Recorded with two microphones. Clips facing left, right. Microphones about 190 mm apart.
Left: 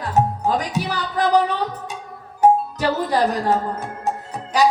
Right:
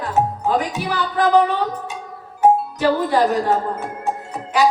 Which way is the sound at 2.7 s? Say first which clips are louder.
Right 3 dB; 40° left (ahead or behind).